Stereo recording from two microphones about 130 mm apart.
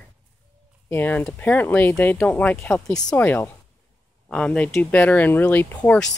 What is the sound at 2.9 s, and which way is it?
Speech, 30° left (ahead or behind).